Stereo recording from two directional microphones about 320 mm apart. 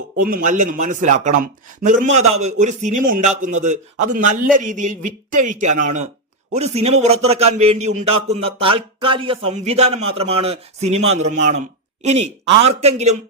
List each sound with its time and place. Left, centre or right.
0.2 s speech: right